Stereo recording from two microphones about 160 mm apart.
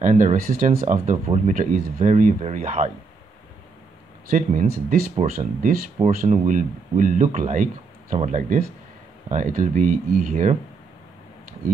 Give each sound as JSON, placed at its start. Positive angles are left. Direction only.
{"t": 0.0, "sound": "speech", "side_deg": -50}
{"t": 0.7, "sound": "speech", "side_deg": -45}
{"t": 4.3, "sound": "speech", "side_deg": -55}